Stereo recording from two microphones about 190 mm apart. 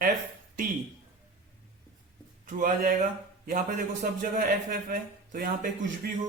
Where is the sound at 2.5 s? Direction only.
45° right (ahead or behind).